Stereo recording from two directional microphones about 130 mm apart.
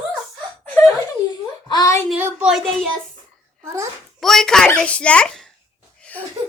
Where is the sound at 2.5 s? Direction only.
5° left (ahead or behind).